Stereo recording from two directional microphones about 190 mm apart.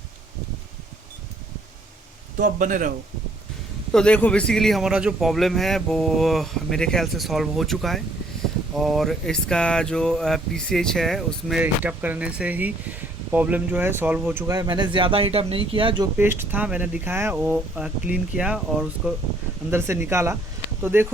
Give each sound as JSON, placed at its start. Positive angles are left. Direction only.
{"t": 2.4, "sound": "a man's voice", "side_deg": -45}
{"t": 3.9, "sound": "speech", "side_deg": 5}
{"t": 16.1, "sound": "speech", "side_deg": -10}